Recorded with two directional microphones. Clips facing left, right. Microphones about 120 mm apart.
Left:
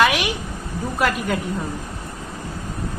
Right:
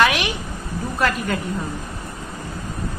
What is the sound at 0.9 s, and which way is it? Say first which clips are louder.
Speech: even; 10° left (ahead or behind).